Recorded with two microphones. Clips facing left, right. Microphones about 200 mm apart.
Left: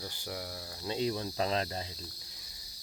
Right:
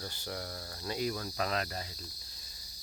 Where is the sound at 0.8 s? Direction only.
25° left (ahead or behind).